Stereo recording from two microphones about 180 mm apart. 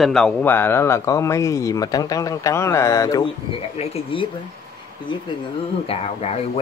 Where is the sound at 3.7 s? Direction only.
30° left (ahead or behind).